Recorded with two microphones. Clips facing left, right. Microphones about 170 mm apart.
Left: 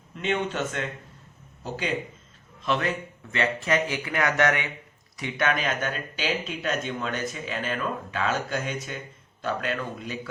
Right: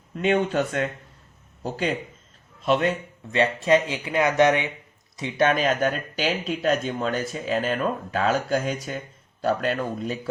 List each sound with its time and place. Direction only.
0.2 s speech: 40° right (ahead or behind)
2.6 s speech: 25° right (ahead or behind)
5.2 s speech: 30° right (ahead or behind)